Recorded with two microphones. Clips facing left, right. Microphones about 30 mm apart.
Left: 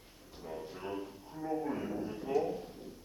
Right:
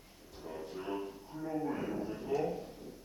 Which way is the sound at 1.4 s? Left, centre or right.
Centre.